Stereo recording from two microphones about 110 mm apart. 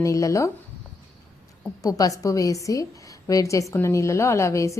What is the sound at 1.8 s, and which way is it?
A woman's voice, 35° left (ahead or behind).